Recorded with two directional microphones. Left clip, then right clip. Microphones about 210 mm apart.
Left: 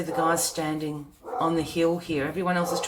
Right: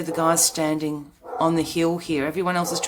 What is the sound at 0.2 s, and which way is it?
Speech, 50° right (ahead or behind).